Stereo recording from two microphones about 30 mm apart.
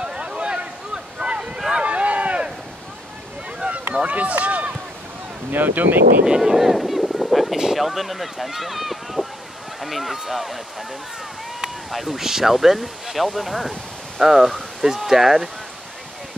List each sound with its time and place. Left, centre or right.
0.0 s a sound: right
0.9 s boat: right
1.9 s a sound: right
3.6 s run: right
5.6 s speech: right
6.2 s boat: right; by 7.5 s centre
7.7 s speech: centre
11.9 s speech: centre
12.2 s speech: centre